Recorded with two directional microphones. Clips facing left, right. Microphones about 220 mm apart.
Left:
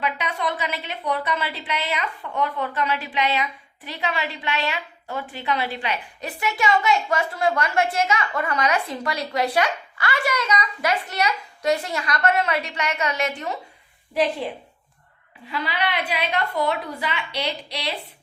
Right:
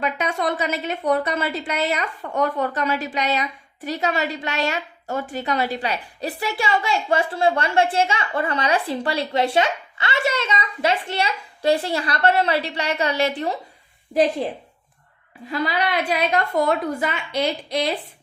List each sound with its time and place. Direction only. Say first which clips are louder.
0.0 s a woman's voice: right 3 dB; 45° right (ahead or behind)
15.4 s a woman's voice: right 4 dB; 40° right (ahead or behind)